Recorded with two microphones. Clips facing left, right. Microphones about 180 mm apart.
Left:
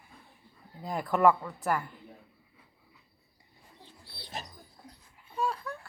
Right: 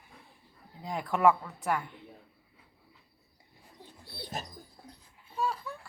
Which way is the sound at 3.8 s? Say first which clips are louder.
Right 6 dB; 50° right (ahead or behind).